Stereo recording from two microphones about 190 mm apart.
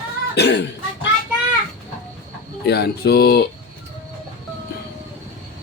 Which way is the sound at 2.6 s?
60° left (ahead or behind).